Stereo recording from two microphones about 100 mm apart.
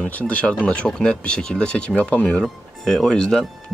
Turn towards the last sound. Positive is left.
turn(degrees=5)  # may be behind; listen again after turning